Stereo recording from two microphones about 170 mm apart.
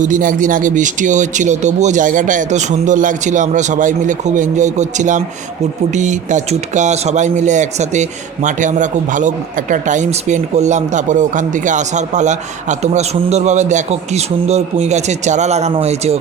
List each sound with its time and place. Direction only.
0.0 s speech: 50° right (ahead or behind)